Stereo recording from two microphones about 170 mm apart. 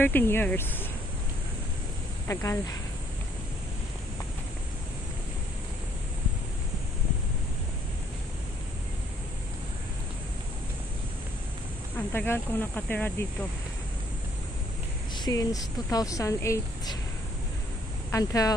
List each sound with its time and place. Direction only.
0.0 s speech: 10° left (ahead or behind)
2.2 s speech: 15° left (ahead or behind)
12.1 s speech: 10° left (ahead or behind)
15.2 s speech: 20° left (ahead or behind)
18.1 s speech: 20° left (ahead or behind)